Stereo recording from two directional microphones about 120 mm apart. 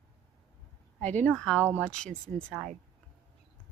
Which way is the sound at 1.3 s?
5° left (ahead or behind).